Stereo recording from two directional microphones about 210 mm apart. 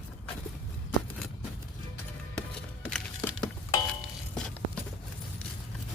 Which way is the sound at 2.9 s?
5° left (ahead or behind).